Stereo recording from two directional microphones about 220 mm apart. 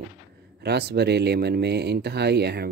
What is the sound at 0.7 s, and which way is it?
Speech, 50° right (ahead or behind).